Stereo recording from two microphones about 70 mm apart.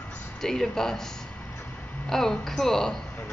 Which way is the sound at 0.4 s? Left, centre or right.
Centre.